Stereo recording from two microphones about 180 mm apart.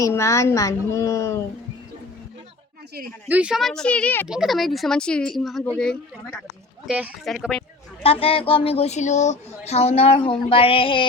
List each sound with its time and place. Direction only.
0.0 s a woman's voice: 15° left (ahead or behind)
3.2 s speech: 5° right (ahead or behind); by 4.3 s 10° left (ahead or behind)
4.3 s speech: centre (ahead or behind)
8.0 s child singing: 30° left (ahead or behind)